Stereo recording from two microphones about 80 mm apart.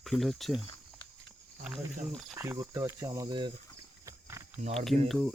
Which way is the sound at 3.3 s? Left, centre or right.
Right.